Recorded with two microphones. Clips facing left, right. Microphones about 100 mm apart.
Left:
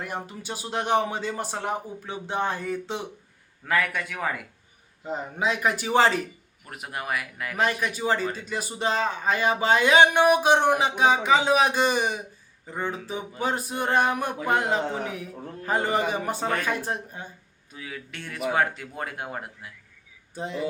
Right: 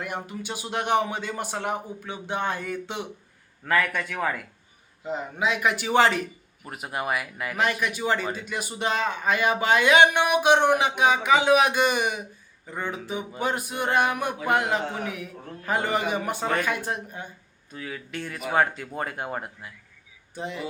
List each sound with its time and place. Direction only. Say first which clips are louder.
0.3 s speech: right 1 dB; 35° left (ahead or behind)
3.7 s speech: right 1 dB; 5° left (ahead or behind)
5.0 s speech: even; 40° left (ahead or behind)
6.7 s speech: right 3 dB; 5° right (ahead or behind)
7.6 s speech: even; 35° left (ahead or behind)
13.4 s speech: left 1 dB; 30° left (ahead or behind)
17.7 s speech: right 3 dB; 5° left (ahead or behind)
20.3 s speech: left 2 dB; 35° left (ahead or behind)